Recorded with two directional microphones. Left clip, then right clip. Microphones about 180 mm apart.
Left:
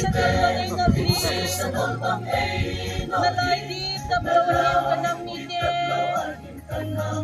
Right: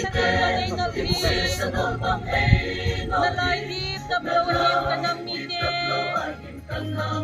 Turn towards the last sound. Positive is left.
turn(degrees=60)  # may be behind; listen again after turning